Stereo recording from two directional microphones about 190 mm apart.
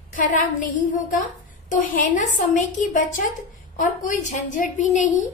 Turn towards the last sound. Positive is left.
turn(degrees=40)  # may be behind; listen again after turning